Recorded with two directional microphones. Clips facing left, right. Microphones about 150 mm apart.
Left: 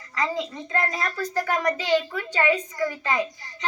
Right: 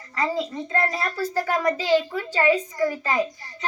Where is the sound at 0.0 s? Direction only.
35° right (ahead or behind).